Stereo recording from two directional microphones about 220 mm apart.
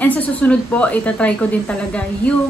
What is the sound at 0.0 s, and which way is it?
Speech, 5° left (ahead or behind).